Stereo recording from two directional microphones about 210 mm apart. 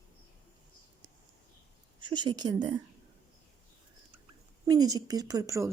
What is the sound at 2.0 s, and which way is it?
Speech, 20° right (ahead or behind).